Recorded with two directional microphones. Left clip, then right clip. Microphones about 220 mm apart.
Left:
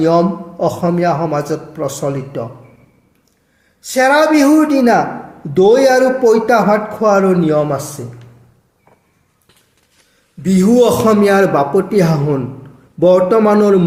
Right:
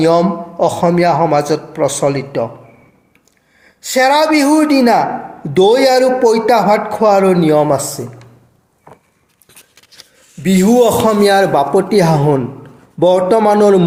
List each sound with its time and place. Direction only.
0.0 s speech: 15° right (ahead or behind)
3.8 s a woman's voice: 10° right (ahead or behind)
10.4 s a man's voice: 20° right (ahead or behind)